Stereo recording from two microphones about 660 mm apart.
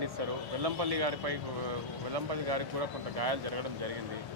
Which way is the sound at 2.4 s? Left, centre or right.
Right.